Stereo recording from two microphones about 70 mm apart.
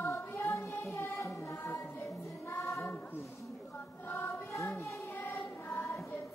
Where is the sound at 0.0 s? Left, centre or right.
Left.